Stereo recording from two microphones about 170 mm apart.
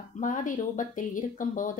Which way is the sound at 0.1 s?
50° left (ahead or behind).